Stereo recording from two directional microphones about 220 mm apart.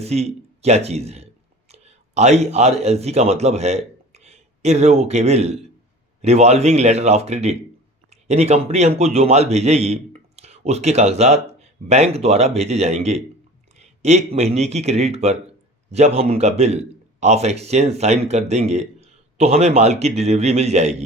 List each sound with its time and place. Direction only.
0.0 s a man's voice: 30° right (ahead or behind)